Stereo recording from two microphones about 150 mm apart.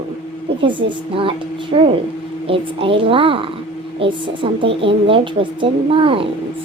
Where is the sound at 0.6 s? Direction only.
35° right (ahead or behind).